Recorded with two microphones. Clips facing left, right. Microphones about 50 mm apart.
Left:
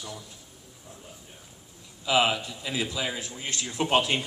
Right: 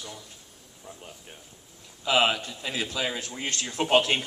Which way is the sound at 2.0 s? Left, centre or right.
Right.